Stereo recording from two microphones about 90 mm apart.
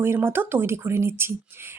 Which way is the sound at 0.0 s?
25° right (ahead or behind).